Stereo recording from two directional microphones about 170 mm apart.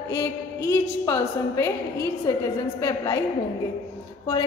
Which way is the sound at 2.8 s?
20° left (ahead or behind).